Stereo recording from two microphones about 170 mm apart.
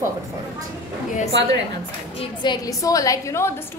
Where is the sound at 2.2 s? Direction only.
25° left (ahead or behind).